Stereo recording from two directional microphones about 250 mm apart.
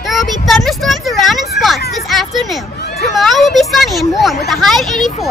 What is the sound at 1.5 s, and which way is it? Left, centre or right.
Children playing, centre.